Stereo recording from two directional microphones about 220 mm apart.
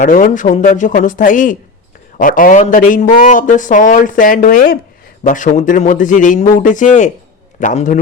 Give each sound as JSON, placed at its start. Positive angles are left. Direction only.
{"t": 0.0, "sound": "a man's voice", "side_deg": 35}